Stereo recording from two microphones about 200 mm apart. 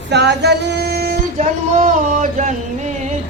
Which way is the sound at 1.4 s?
35° right (ahead or behind).